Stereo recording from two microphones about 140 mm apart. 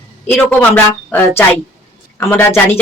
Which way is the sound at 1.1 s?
10° left (ahead or behind).